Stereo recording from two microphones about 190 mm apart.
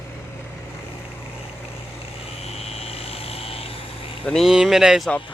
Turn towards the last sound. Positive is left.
turn(degrees=0)  # may be behind; listen again after turning